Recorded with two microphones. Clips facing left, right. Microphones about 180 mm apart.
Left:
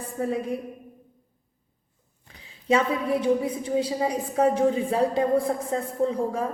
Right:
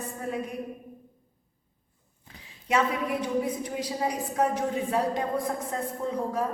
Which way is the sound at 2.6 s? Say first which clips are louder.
Left 4 dB; 30° left (ahead or behind).